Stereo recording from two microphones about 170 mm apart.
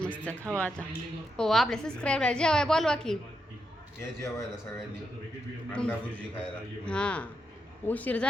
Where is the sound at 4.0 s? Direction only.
15° left (ahead or behind).